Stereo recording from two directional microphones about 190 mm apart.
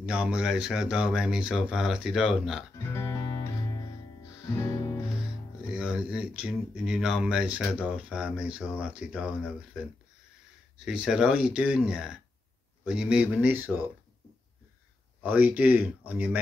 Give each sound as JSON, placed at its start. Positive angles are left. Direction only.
{"t": 0.0, "sound": "speech", "side_deg": -5}
{"t": 2.9, "sound": "guitar", "side_deg": 15}
{"t": 4.6, "sound": "music", "side_deg": 15}
{"t": 5.7, "sound": "speech", "side_deg": -5}
{"t": 10.9, "sound": "speech", "side_deg": -5}
{"t": 15.2, "sound": "speech", "side_deg": -10}